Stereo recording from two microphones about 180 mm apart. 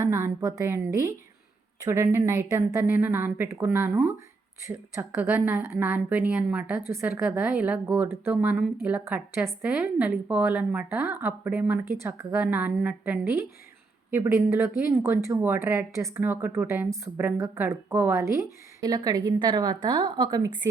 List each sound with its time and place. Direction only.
0.0 s a woman's voice: 15° right (ahead or behind)